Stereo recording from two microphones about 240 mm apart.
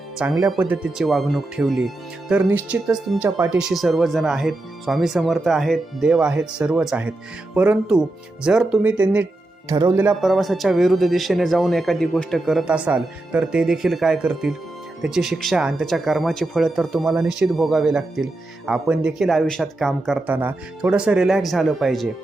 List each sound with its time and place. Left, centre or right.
0.2 s speech: centre
3.2 s speech: centre
3.6 s speech: centre
9.6 s speech: centre
9.9 s speech: centre